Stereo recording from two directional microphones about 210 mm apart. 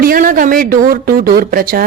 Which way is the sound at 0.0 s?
40° right (ahead or behind).